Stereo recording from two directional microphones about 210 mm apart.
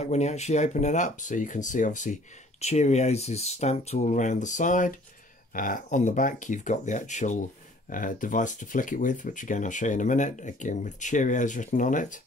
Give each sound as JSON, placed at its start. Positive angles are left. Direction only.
{"t": 0.0, "sound": "speech", "side_deg": 30}